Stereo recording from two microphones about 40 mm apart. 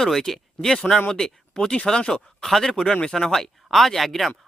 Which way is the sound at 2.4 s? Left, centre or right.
Centre.